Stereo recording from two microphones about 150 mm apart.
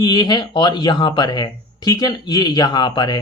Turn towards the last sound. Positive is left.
turn(degrees=30)  # may be behind; listen again after turning